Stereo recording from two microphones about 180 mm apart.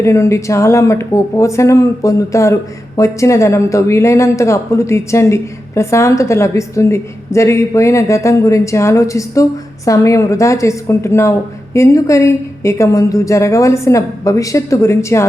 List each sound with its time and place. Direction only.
0.0 s speech: 15° left (ahead or behind)